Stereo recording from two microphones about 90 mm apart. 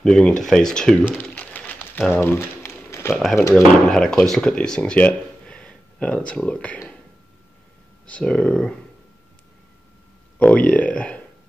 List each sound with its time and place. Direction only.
0.0 s speech: 5° left (ahead or behind)
1.3 s pigeon: 15° left (ahead or behind)
2.1 s a sound: 30° left (ahead or behind)
3.1 s speech: 5° left (ahead or behind)
8.1 s speech: 15° left (ahead or behind)
10.4 s speech: 15° left (ahead or behind)